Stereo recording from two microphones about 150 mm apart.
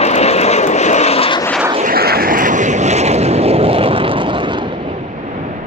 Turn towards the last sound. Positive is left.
turn(degrees=-35)  # may be behind; listen again after turning